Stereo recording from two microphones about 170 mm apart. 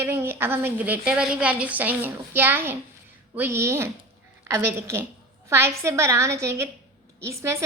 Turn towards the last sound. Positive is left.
turn(degrees=-15)  # may be behind; listen again after turning